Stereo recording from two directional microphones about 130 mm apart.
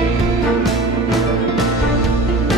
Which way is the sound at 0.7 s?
Centre (ahead or behind).